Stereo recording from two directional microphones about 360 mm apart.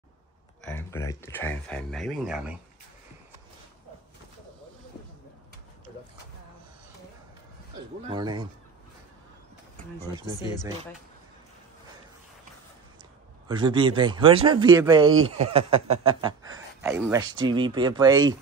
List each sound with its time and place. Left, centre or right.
0.7 s speech: centre
8.1 s a man's voice: centre
13.5 s a man's voice: centre
16.8 s a man's voice: centre